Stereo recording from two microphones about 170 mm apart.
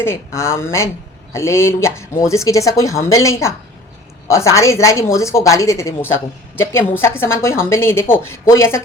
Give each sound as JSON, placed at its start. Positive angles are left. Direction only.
{"t": 0.0, "sound": "a woman's voice", "side_deg": 15}